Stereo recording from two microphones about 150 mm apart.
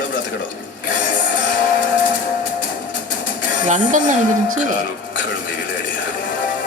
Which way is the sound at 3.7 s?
60° right (ahead or behind).